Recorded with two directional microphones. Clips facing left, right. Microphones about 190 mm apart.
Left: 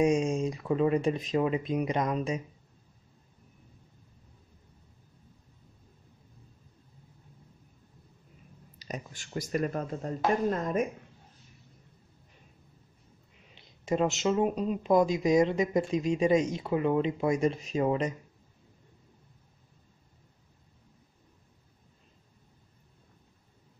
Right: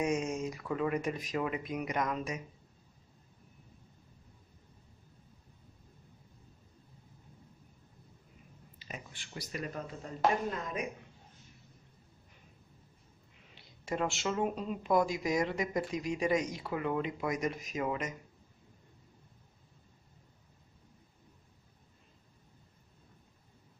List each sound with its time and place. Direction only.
0.0 s speech: 25° left (ahead or behind)
8.7 s speech: 40° left (ahead or behind)
13.6 s speech: 20° left (ahead or behind)